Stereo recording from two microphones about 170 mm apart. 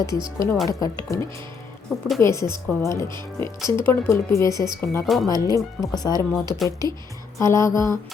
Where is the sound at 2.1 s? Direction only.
15° left (ahead or behind).